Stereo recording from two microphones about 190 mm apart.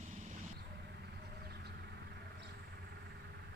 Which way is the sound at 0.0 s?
45° right (ahead or behind).